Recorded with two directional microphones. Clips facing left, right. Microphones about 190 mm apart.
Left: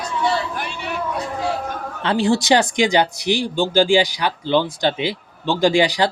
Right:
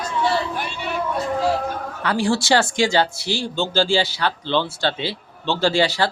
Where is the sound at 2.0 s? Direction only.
25° left (ahead or behind).